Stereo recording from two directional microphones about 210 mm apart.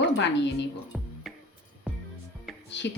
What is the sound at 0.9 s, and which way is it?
Music, centre (ahead or behind).